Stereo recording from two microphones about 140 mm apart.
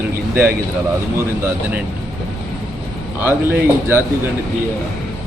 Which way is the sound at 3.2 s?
15° right (ahead or behind).